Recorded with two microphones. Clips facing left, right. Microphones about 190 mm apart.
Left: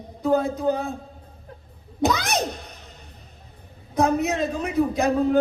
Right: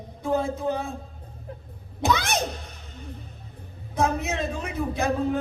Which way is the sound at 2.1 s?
35° left (ahead or behind).